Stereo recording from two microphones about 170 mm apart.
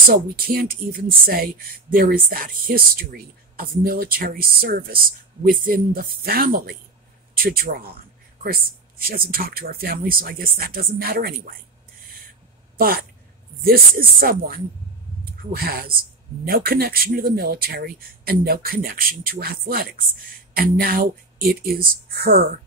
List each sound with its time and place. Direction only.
0.0 s speech: 60° right (ahead or behind)
12.7 s speech: 60° right (ahead or behind)